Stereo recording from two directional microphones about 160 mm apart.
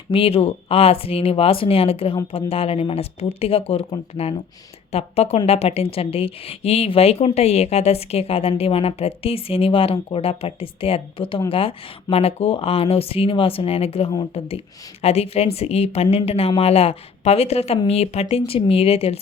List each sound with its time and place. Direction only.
0.1 s a woman's voice: 35° left (ahead or behind)